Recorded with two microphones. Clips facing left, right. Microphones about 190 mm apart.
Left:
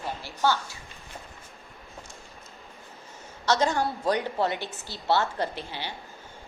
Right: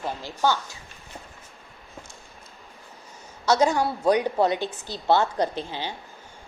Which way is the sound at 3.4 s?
10° right (ahead or behind).